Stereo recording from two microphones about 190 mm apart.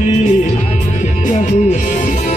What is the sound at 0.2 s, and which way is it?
Music, 40° left (ahead or behind).